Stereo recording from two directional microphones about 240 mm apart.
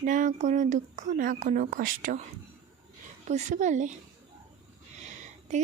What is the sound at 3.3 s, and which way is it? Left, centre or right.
Speech, right.